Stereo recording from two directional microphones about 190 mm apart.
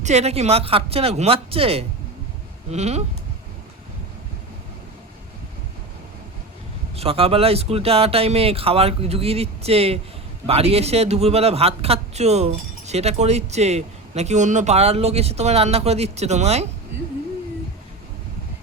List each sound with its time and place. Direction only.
0.0 s a man's voice: 35° right (ahead or behind)
6.9 s a man's voice: 30° right (ahead or behind)